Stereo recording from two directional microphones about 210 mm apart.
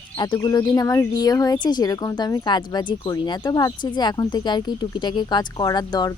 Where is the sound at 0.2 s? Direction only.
20° left (ahead or behind).